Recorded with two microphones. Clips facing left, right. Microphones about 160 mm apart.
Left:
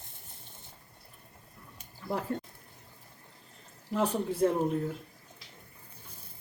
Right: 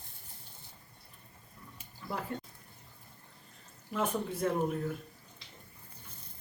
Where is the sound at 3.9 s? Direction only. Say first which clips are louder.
Left 4 dB; 30° left (ahead or behind).